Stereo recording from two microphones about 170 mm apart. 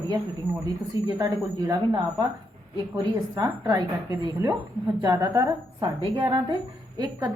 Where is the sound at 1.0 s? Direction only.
20° right (ahead or behind).